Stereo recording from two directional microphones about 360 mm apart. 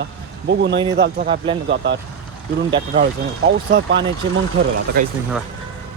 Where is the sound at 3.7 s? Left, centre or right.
Right.